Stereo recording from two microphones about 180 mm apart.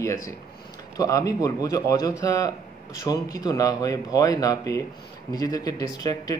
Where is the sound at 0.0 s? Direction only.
15° left (ahead or behind).